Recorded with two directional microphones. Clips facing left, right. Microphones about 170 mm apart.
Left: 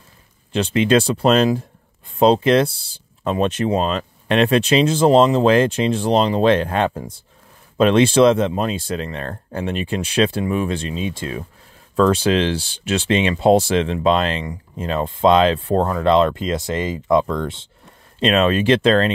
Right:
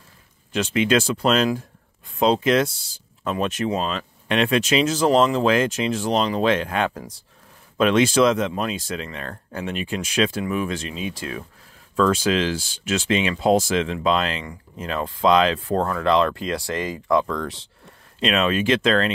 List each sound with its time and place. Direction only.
0.5 s speech: 30° left (ahead or behind)
18.2 s speech: 35° left (ahead or behind)